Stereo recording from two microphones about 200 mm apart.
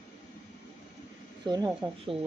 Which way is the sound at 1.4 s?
20° right (ahead or behind).